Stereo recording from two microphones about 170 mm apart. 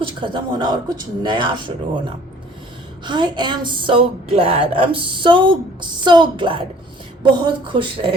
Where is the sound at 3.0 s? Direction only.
25° right (ahead or behind).